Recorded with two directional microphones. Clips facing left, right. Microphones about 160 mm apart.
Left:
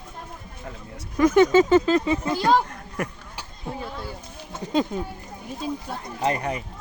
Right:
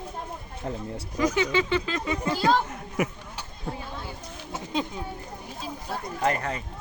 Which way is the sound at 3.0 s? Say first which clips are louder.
Right 3 dB; 10° right (ahead or behind).